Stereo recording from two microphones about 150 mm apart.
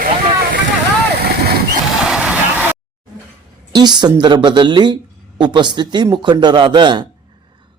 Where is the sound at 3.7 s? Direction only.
30° right (ahead or behind).